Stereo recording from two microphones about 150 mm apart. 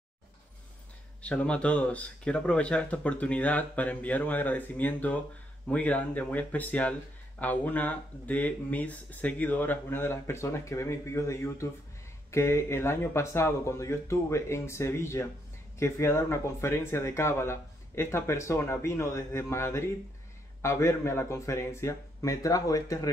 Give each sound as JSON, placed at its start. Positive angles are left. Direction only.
{"t": 1.2, "sound": "speech", "side_deg": 10}